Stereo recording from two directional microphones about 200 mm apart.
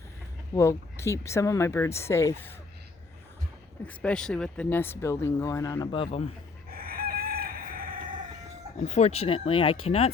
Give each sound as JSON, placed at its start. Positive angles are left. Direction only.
{"t": 0.5, "sound": "speech", "side_deg": 15}
{"t": 3.8, "sound": "speech", "side_deg": 5}
{"t": 6.7, "sound": "chicken", "side_deg": -50}
{"t": 8.8, "sound": "speech", "side_deg": 35}